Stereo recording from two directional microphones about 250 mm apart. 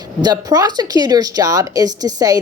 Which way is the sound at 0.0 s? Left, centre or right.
Centre.